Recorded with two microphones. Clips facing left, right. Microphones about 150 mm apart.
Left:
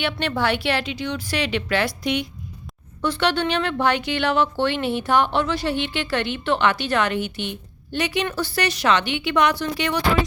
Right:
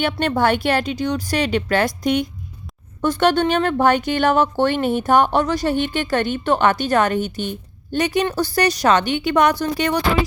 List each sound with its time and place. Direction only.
0.0 s a woman's voice: 45° right (ahead or behind)